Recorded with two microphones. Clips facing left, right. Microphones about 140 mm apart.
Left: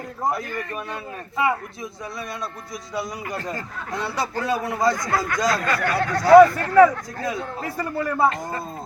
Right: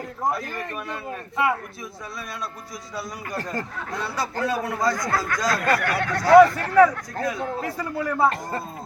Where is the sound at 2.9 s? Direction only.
20° left (ahead or behind).